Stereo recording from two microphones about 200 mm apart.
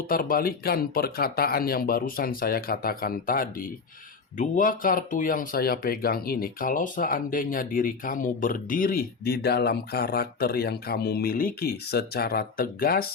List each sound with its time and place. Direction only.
0.1 s speech: 45° left (ahead or behind)